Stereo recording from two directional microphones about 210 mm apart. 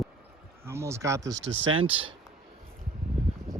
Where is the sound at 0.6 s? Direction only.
15° right (ahead or behind).